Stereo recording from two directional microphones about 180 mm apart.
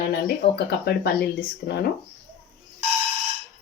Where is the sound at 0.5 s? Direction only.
60° left (ahead or behind).